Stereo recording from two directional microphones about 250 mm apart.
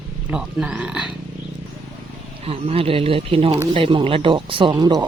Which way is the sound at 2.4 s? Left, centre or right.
Right.